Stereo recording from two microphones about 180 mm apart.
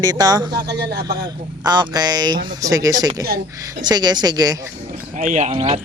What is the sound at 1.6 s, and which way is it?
Speech, 25° right (ahead or behind).